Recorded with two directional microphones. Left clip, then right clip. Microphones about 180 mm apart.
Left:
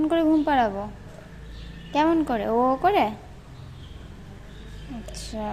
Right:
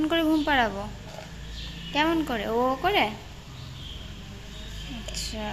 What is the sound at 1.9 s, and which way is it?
Speech, 35° left (ahead or behind).